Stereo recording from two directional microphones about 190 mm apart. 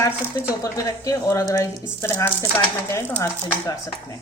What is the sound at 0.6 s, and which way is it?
A woman's voice, 15° left (ahead or behind).